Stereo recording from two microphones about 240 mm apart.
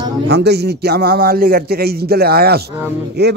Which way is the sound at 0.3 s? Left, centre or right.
Right.